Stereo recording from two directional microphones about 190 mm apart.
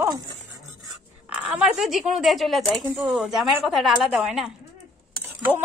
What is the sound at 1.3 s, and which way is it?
A woman's voice, 5° right (ahead or behind).